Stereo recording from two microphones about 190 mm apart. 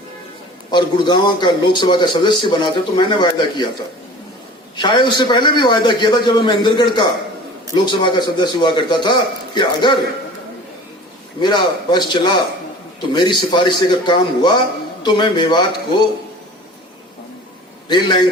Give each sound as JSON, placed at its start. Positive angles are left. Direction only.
{"t": 0.7, "sound": "a man's voice", "side_deg": 25}
{"t": 4.8, "sound": "a man's voice", "side_deg": 25}
{"t": 11.3, "sound": "a man's voice", "side_deg": 25}
{"t": 17.8, "sound": "a man's voice", "side_deg": 25}